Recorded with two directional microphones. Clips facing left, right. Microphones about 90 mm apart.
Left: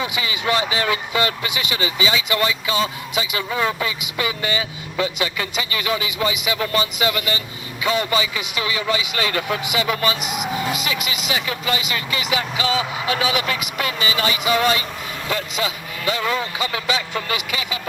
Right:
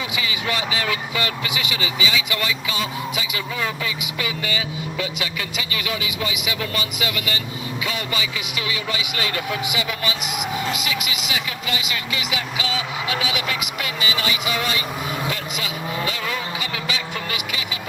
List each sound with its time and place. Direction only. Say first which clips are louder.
0.0 s a man's voice: left 3 dB; 30° left (ahead or behind)